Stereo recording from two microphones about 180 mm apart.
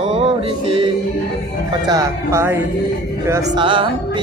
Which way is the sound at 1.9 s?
15° right (ahead or behind).